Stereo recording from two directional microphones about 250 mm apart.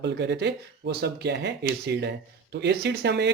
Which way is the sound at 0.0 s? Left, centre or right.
Right.